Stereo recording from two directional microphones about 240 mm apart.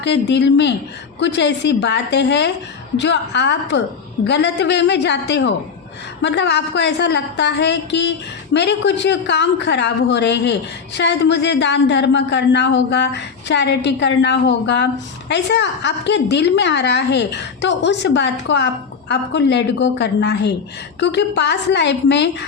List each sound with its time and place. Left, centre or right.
0.0 s a woman's voice: left